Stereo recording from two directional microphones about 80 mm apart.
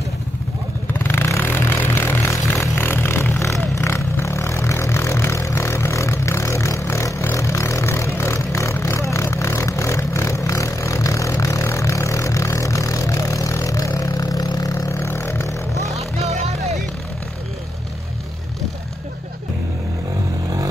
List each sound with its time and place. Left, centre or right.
0.9 s vehicle: left
15.0 s vehicle: left